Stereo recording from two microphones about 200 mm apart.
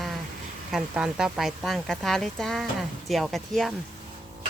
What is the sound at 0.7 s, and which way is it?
Speech, 5° right (ahead or behind).